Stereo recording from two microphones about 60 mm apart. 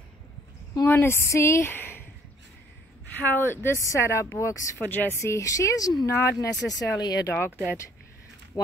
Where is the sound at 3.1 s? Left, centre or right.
Left.